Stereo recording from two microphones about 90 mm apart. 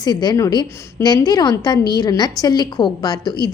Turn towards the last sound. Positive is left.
turn(degrees=50)  # may be behind; listen again after turning